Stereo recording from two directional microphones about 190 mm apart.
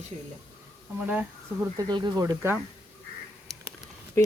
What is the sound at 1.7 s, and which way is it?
Speech, 20° right (ahead or behind).